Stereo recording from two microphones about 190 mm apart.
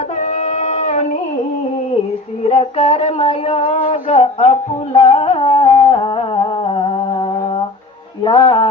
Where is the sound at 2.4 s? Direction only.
35° left (ahead or behind).